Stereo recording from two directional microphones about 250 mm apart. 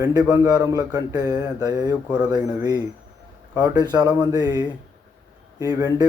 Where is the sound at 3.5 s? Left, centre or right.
Centre.